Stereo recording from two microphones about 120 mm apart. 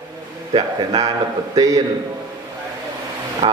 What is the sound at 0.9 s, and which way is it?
Speech, 30° right (ahead or behind).